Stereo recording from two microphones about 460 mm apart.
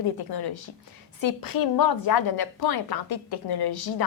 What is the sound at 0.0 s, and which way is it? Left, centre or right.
A woman's voice, left.